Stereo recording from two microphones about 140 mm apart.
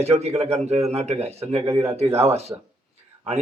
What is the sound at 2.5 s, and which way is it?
Speech, 20° right (ahead or behind).